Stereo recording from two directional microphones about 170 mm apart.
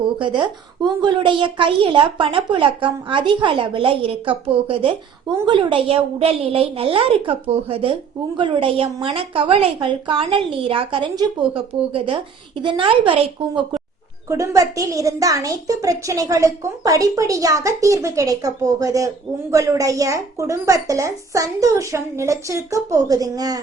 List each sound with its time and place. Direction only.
0.2 s a woman's voice: 30° right (ahead or behind)
14.3 s a woman's voice: 20° right (ahead or behind)